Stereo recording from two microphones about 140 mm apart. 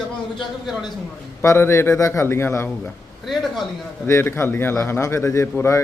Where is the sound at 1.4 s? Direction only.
20° left (ahead or behind).